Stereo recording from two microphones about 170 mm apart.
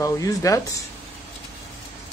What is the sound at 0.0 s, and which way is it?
Speech, 20° left (ahead or behind).